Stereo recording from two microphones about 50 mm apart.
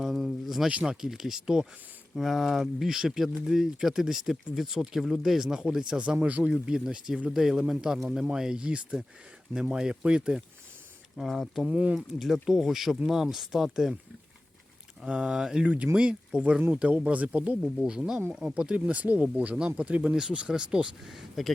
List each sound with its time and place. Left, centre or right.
0.0 s a sound: centre
0.9 s speech: centre
2.1 s speech: centre
6.0 s speech: right
6.7 s speech: centre
11.2 s speech: centre
11.7 s speech: right
12.2 s speech: centre
15.0 s speech: centre
15.6 s speech: right
16.0 s speech: centre
16.4 s speech: right
17.8 s speech: centre
21.0 s speech: centre